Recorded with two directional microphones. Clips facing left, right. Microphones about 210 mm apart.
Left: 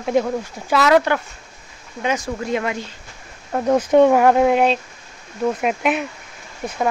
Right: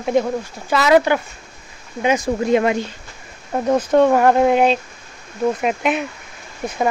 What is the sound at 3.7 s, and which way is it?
Speech, 15° left (ahead or behind).